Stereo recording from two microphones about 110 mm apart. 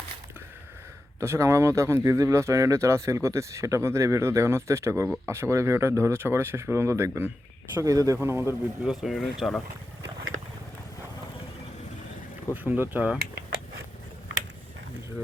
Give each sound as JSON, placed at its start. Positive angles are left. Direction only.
{"t": 1.2, "sound": "speech", "side_deg": -25}
{"t": 8.8, "sound": "speech", "side_deg": -5}
{"t": 12.6, "sound": "speech", "side_deg": -15}